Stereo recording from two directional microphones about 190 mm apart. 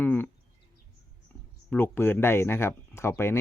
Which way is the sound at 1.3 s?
10° left (ahead or behind).